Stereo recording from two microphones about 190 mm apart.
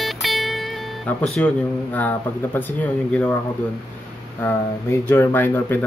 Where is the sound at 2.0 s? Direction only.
10° left (ahead or behind).